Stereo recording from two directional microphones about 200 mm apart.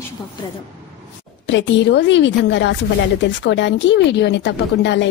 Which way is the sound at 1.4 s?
65° left (ahead or behind).